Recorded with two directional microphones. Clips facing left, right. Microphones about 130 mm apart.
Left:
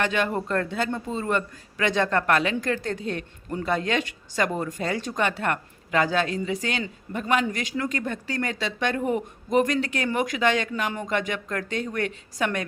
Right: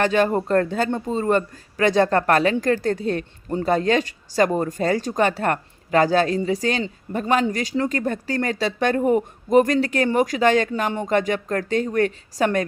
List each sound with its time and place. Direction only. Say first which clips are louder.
0.0 s speech: right 6 dB; 40° right (ahead or behind)